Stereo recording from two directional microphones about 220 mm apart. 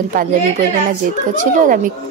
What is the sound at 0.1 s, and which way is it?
A woman's voice, 40° right (ahead or behind).